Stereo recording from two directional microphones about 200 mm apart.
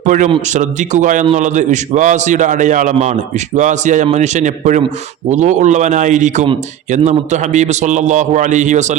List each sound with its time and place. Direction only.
0.0 s a man's voice: 40° right (ahead or behind)